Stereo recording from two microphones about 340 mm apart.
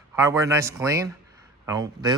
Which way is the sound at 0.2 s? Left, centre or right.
Centre.